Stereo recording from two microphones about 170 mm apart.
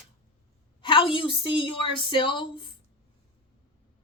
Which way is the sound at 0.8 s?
30° left (ahead or behind).